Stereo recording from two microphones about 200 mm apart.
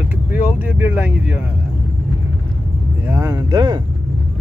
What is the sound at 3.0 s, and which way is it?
Speech, 15° right (ahead or behind).